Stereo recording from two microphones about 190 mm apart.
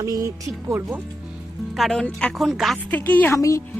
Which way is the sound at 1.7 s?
Centre (ahead or behind).